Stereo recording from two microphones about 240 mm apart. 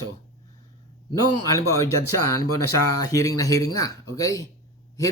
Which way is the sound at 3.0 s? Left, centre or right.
Centre.